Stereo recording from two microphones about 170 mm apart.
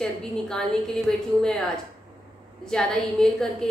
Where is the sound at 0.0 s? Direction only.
5° left (ahead or behind).